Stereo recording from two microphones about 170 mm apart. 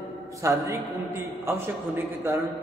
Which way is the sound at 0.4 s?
20° right (ahead or behind).